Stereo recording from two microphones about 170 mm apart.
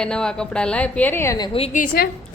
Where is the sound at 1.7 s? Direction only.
50° left (ahead or behind).